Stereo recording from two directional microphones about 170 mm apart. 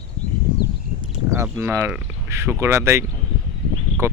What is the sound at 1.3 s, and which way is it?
Speech, 15° right (ahead or behind).